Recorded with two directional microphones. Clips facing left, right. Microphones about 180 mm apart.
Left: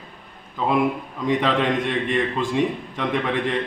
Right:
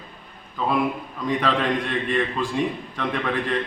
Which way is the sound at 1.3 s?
20° left (ahead or behind).